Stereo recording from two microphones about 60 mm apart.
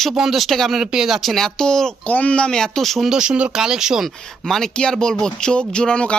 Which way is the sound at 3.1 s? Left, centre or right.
Centre.